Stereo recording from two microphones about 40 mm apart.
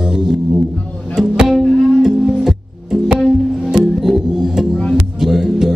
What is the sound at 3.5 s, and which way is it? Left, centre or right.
Music, centre.